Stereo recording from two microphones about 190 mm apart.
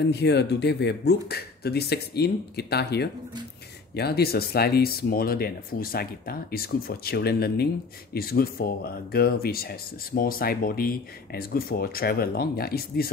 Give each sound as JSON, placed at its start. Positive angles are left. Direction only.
{"t": 0.0, "sound": "speech", "side_deg": 60}